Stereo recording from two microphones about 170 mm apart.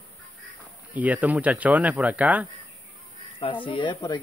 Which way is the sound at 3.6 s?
30° left (ahead or behind).